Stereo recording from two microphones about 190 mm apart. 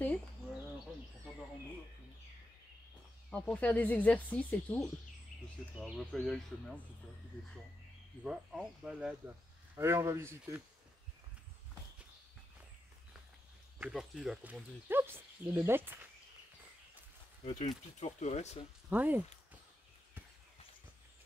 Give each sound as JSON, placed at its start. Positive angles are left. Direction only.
{"t": 3.3, "sound": "speech", "side_deg": 5}
{"t": 8.2, "sound": "speech", "side_deg": -5}
{"t": 9.8, "sound": "speech", "side_deg": -15}
{"t": 13.7, "sound": "speech", "side_deg": -5}
{"t": 17.5, "sound": "speech", "side_deg": 25}
{"t": 18.0, "sound": "speech", "side_deg": 35}
{"t": 18.9, "sound": "speech", "side_deg": -10}